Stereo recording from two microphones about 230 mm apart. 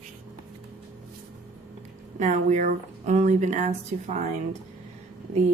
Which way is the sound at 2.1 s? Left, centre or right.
Right.